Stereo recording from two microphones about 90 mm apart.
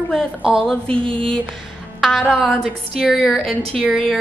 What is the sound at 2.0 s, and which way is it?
A woman's voice, centre (ahead or behind).